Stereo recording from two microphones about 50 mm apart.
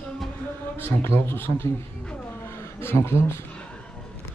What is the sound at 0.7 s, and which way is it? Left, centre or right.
Speech, left.